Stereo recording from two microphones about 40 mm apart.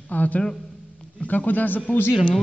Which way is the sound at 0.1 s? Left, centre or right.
Left.